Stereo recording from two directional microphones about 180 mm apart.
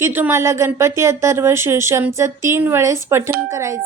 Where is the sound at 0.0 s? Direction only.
15° right (ahead or behind).